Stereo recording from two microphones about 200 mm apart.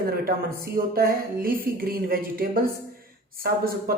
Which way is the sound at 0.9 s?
45° right (ahead or behind).